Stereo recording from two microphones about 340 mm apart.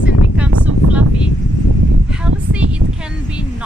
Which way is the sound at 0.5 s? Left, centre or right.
Right.